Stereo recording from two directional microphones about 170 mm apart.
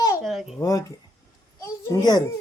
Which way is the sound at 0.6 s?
20° left (ahead or behind).